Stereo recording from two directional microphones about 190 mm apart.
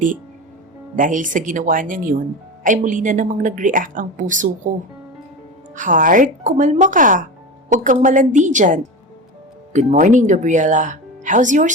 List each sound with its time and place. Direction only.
0.9 s a woman's voice: 45° right (ahead or behind)
5.7 s a woman's voice: 45° right (ahead or behind)